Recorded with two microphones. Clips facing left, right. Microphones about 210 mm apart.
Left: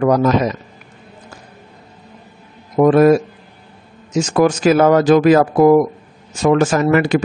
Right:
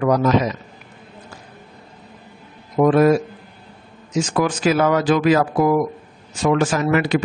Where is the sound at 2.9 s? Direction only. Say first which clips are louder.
Left 4 dB; 45° left (ahead or behind).